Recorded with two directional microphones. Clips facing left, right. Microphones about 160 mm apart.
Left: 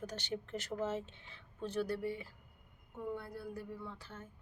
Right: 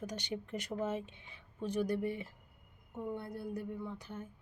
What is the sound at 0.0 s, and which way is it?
A woman's voice, 10° right (ahead or behind).